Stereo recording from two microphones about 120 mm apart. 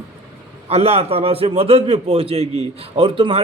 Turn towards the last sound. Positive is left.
turn(degrees=-45)  # may be behind; listen again after turning